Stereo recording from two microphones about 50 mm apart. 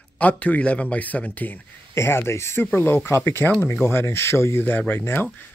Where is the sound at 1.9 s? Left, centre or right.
Left.